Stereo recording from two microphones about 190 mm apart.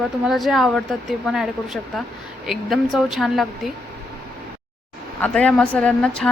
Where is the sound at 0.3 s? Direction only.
Centre (ahead or behind).